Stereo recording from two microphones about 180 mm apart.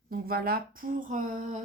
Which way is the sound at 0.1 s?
55° right (ahead or behind).